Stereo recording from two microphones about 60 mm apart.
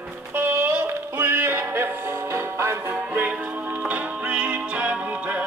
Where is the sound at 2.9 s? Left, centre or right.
Right.